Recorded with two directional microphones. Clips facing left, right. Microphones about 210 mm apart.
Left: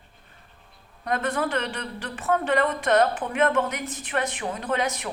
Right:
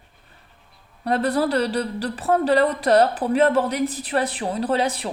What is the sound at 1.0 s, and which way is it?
A woman's voice, 35° right (ahead or behind).